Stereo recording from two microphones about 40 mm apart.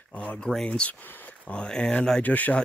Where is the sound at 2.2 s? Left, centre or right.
Left.